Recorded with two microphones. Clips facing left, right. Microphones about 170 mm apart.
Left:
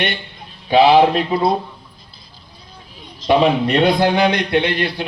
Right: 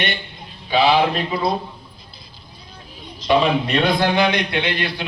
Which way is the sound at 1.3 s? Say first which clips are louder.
Left 4 dB; 50° left (ahead or behind).